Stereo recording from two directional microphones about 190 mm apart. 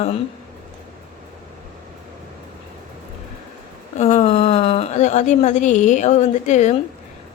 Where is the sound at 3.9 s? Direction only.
35° left (ahead or behind).